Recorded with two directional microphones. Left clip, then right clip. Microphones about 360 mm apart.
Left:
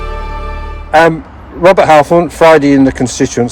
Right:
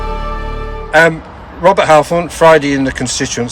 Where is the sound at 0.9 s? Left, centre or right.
Centre.